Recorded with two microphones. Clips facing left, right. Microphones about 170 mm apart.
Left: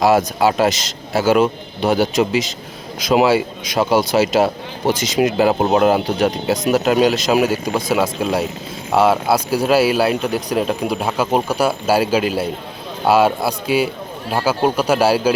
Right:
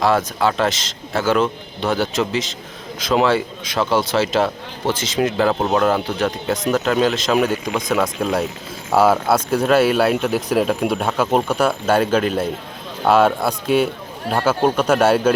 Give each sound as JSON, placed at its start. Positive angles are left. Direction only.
{"t": 0.3, "sound": "speech", "side_deg": 10}
{"t": 7.5, "sound": "speech", "side_deg": 35}
{"t": 7.9, "sound": "speech", "side_deg": 5}